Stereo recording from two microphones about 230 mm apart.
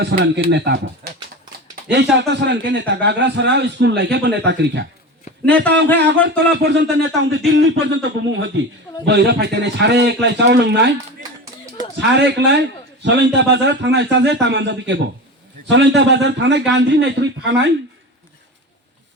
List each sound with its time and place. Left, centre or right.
0.0 s a man's voice: right
1.0 s typing: right
1.9 s a man's voice: right
6.0 s a man's voice: right
12.1 s a man's voice: right